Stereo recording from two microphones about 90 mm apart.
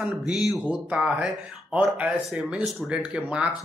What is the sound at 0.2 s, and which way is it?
Speech, 5° right (ahead or behind).